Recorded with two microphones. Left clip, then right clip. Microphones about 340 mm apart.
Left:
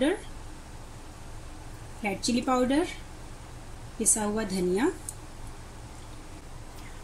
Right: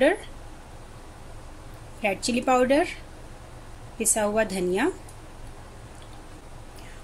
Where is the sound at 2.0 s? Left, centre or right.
Right.